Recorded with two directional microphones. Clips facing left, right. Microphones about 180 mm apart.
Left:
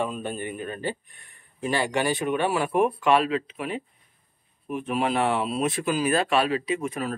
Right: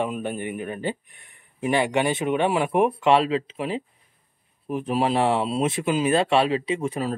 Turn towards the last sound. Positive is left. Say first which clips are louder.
# right 2 dB
turn(degrees=-30)  # may be behind; listen again after turning